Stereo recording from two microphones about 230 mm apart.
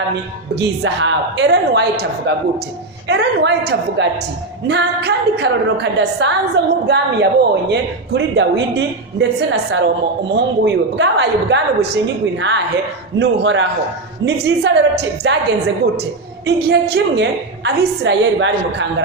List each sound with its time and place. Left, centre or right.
0.1 s a woman's voice: right